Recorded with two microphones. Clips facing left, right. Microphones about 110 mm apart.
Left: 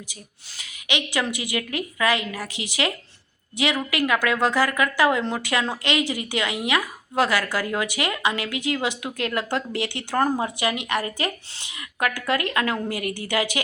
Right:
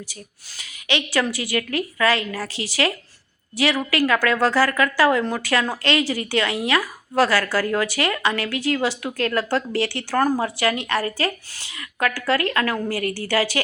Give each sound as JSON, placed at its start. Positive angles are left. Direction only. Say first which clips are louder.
{"t": 0.6, "sound": "a woman's voice", "louder": "right 3 dB", "side_deg": 20}